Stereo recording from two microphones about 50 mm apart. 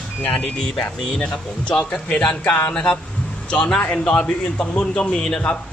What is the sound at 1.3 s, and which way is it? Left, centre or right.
Speech, left.